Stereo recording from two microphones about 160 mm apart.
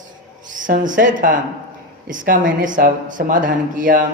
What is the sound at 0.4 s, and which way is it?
Speech, 55° right (ahead or behind).